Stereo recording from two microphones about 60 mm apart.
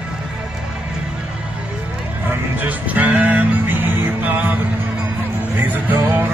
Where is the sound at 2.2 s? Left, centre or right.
Right.